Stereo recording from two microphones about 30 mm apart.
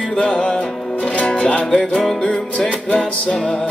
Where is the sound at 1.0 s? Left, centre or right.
Left.